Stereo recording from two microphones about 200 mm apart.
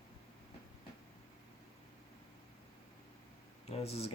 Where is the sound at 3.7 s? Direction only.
30° left (ahead or behind).